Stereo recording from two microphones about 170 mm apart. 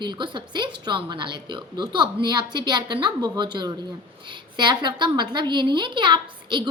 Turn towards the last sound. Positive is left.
turn(degrees=-25)  # may be behind; listen again after turning